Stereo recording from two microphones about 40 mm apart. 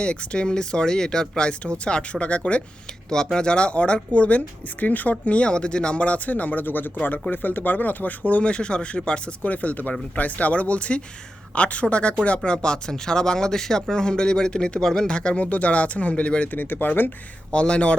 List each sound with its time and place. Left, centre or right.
0.0 s speech: left
5.2 s speech: left
9.4 s speech: left
12.5 s speech: left
15.4 s speech: left
16.5 s speech: left
17.5 s speech: left